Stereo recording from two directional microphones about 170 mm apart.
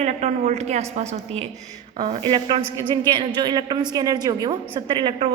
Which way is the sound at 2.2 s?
30° right (ahead or behind).